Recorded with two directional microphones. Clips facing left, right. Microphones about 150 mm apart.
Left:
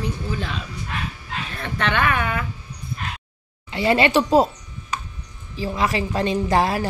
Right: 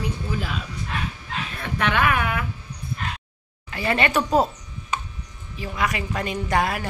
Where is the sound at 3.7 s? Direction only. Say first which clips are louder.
Left 5 dB; 25° left (ahead or behind).